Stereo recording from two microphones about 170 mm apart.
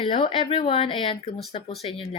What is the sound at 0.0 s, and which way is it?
Speech, 30° left (ahead or behind).